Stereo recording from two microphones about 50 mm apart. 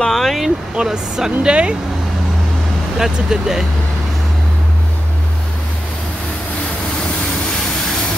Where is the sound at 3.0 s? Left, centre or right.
Centre.